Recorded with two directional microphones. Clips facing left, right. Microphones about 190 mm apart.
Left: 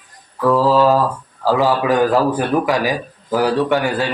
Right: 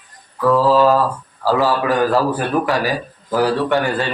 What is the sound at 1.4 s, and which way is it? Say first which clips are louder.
A man's voice: left 1 dB; 15° left (ahead or behind).